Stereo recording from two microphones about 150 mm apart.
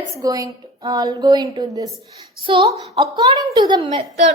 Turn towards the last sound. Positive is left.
turn(degrees=-35)  # may be behind; listen again after turning